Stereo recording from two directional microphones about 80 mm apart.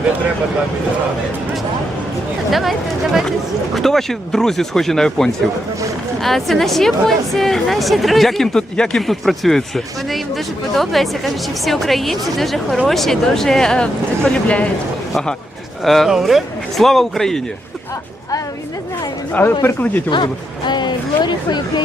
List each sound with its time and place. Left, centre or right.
2.5 s speech: centre
15.8 s speech: centre
19.3 s speech: left
20.1 s speech: left